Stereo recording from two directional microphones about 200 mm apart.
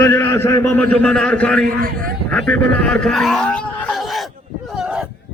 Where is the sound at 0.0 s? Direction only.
10° left (ahead or behind).